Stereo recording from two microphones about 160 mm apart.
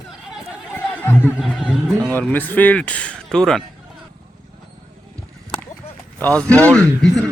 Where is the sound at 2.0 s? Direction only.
10° left (ahead or behind).